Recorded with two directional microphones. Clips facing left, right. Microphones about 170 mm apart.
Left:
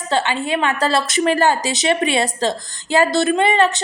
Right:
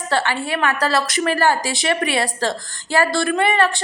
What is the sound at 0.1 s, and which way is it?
A woman's voice, 20° left (ahead or behind).